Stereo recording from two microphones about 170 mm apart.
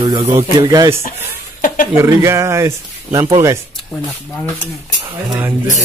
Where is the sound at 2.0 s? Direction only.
15° right (ahead or behind).